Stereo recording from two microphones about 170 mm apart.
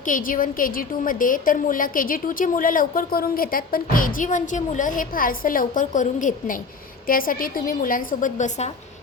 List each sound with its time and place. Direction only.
0.0 s a woman's voice: 50° left (ahead or behind)